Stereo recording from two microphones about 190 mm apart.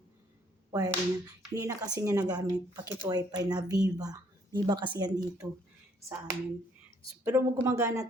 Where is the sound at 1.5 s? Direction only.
20° right (ahead or behind).